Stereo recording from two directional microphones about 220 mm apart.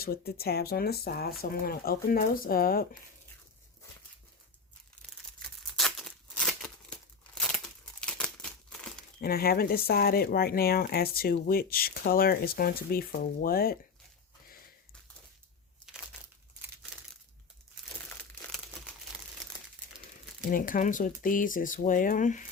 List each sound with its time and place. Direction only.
0.0 s speech: 45° left (ahead or behind)
5.4 s tearing: centre (ahead or behind)
8.0 s crumpling: 5° left (ahead or behind)
9.2 s speech: 45° left (ahead or behind)
20.5 s speech: 40° left (ahead or behind)